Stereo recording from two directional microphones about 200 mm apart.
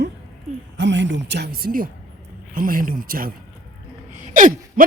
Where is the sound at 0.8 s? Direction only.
65° right (ahead or behind).